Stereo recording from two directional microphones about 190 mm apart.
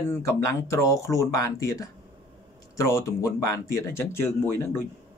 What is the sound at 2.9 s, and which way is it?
Speech, 15° left (ahead or behind).